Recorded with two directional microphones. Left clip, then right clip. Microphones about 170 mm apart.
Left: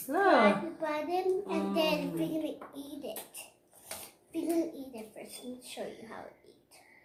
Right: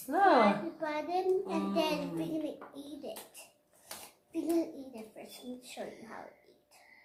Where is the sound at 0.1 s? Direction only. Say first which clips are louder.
Even; 45° right (ahead or behind).